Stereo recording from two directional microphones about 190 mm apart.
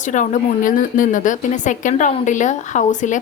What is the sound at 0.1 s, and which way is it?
A woman's voice, 45° left (ahead or behind).